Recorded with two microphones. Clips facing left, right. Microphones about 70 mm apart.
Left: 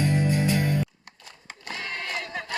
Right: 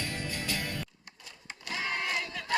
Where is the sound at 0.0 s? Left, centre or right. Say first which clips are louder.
Left 12 dB; centre.